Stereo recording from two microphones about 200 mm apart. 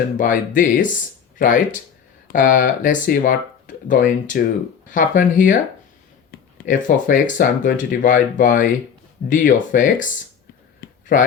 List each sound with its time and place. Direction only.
0.2 s speech: 40° left (ahead or behind)
6.7 s speech: 40° left (ahead or behind)
10.8 s a sound: 40° left (ahead or behind)